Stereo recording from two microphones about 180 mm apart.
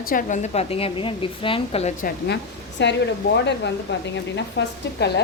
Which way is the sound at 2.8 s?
75° left (ahead or behind).